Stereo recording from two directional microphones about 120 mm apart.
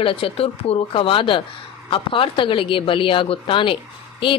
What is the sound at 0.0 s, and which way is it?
Speech, 50° left (ahead or behind).